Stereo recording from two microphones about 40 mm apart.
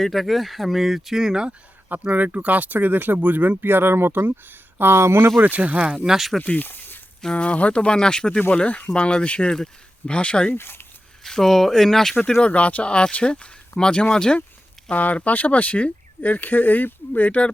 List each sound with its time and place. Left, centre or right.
0.0 s speech: centre
1.9 s speech: right
3.6 s speech: right
5.4 s speech: right
6.1 s speech: centre
6.4 s speech: left
6.7 s a sound: left
7.3 s speech: left
8.6 s speech: left
10.6 s speech: left
11.2 s speech: centre
12.4 s speech: left
14.8 s speech: left